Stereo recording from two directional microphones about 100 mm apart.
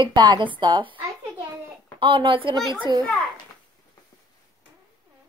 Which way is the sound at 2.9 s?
45° right (ahead or behind).